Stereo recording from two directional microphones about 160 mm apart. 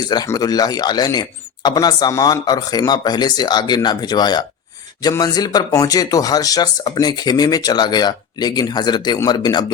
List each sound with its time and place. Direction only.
0.1 s speech: 25° left (ahead or behind)